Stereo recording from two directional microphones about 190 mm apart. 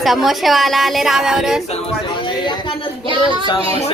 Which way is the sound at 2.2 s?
25° left (ahead or behind).